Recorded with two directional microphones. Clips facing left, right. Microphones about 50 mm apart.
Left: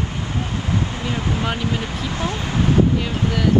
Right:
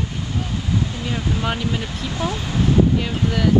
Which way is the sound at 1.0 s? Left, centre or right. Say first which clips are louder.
Left 1 dB; centre.